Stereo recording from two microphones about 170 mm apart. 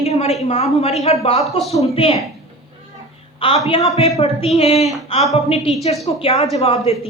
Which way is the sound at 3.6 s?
40° left (ahead or behind).